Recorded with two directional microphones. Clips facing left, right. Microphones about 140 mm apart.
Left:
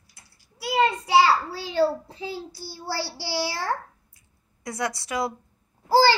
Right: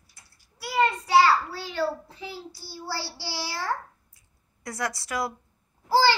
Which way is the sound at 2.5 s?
15° left (ahead or behind).